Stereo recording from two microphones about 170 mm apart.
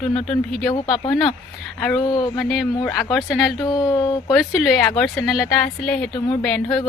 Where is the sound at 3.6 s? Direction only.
20° left (ahead or behind).